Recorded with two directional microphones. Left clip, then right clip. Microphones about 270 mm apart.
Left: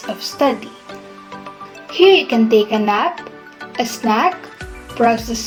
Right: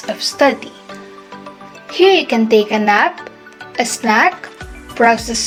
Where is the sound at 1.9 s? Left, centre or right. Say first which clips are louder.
Even; centre.